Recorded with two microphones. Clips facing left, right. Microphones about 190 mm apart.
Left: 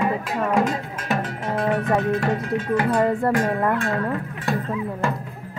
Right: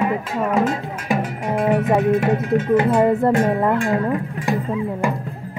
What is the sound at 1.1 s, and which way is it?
Speech, 15° right (ahead or behind).